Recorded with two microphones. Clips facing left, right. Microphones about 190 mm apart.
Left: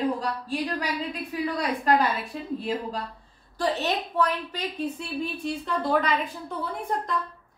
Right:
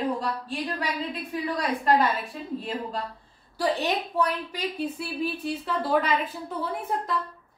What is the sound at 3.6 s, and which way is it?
A woman's voice, 10° right (ahead or behind).